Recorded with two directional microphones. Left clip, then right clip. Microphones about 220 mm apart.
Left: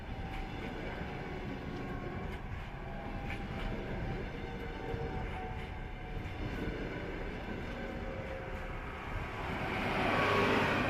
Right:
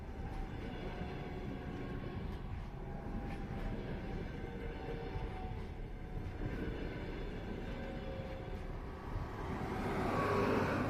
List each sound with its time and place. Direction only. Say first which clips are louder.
9.6 s vehicle: left 5 dB; 45° left (ahead or behind)